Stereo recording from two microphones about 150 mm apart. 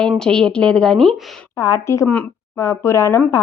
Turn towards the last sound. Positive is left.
turn(degrees=20)  # may be behind; listen again after turning